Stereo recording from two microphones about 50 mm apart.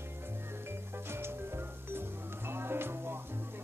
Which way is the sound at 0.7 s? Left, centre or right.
Right.